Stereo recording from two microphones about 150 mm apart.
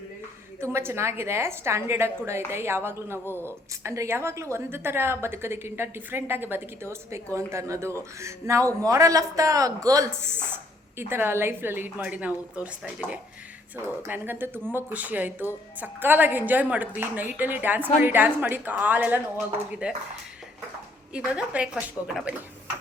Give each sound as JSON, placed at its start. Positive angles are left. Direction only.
{"t": 0.6, "sound": "a woman's voice", "side_deg": -15}
{"t": 21.1, "sound": "a woman's voice", "side_deg": -5}